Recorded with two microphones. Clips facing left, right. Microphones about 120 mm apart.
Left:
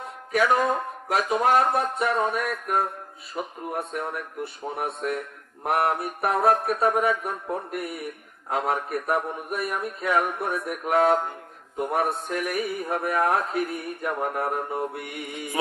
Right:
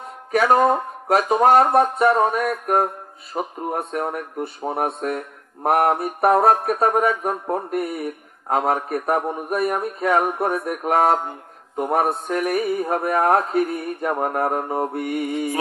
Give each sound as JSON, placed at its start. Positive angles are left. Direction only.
{"t": 0.3, "sound": "speech", "side_deg": -40}
{"t": 3.3, "sound": "mantra", "side_deg": -45}
{"t": 6.3, "sound": "speech", "side_deg": -40}
{"t": 8.5, "sound": "mantra", "side_deg": -40}